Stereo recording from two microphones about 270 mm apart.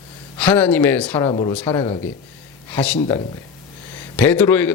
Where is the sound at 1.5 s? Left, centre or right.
Centre.